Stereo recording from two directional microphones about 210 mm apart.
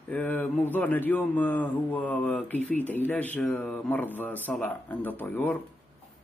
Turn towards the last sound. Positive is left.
turn(degrees=10)  # may be behind; listen again after turning